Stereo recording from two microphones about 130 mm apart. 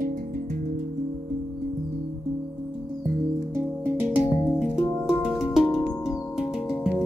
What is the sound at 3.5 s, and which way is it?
Music, 20° right (ahead or behind).